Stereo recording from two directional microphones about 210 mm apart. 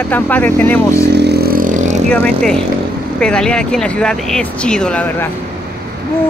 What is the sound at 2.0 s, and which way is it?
Speech, 5° left (ahead or behind).